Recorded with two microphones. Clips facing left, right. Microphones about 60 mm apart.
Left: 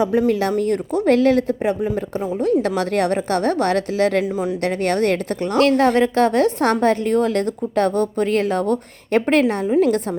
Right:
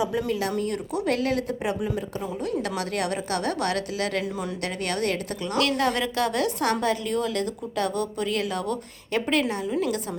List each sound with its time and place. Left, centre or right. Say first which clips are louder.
0.0 s a woman's voice: left 8 dB; left